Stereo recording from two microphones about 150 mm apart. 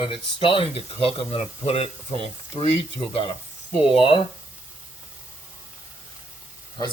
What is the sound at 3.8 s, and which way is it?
Speech, 35° left (ahead or behind).